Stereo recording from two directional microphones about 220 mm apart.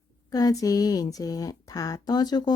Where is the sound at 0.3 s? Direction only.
15° left (ahead or behind).